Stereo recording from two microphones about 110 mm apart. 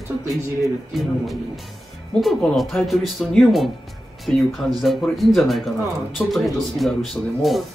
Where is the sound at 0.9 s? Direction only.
Centre (ahead or behind).